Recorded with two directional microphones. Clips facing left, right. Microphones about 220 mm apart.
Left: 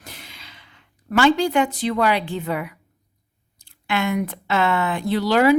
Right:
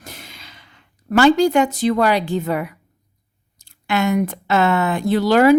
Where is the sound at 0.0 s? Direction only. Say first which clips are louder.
Right 3 dB; 45° right (ahead or behind).